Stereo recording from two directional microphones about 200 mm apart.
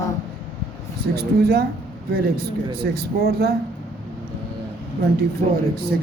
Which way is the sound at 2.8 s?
50° right (ahead or behind).